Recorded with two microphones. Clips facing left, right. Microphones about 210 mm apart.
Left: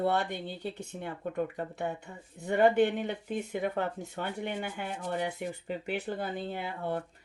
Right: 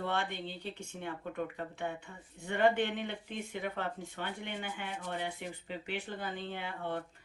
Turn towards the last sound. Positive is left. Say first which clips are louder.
# left 4 dB
turn(degrees=40)  # may be behind; listen again after turning